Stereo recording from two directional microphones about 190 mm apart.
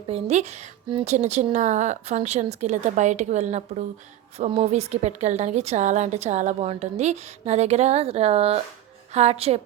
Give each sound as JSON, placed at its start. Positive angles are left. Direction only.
{"t": 0.1, "sound": "a woman's voice", "side_deg": -35}